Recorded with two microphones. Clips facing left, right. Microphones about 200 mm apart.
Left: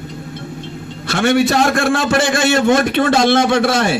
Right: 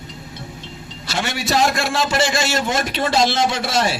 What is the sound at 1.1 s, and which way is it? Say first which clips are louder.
A man's voice: left 9 dB; 55° left (ahead or behind).